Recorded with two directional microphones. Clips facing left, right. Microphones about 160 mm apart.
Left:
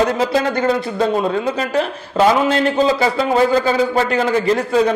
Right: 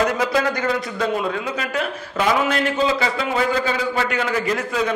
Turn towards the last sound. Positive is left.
turn(degrees=30)  # may be behind; listen again after turning